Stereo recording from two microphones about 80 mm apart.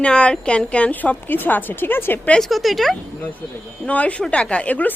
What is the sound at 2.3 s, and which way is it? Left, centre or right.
Speech, centre.